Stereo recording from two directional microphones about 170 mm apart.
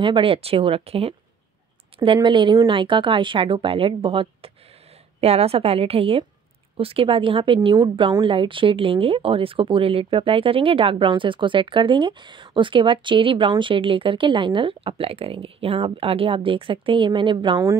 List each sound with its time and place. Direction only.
0.0 s speech: 30° right (ahead or behind)
2.1 s a woman's voice: 25° right (ahead or behind)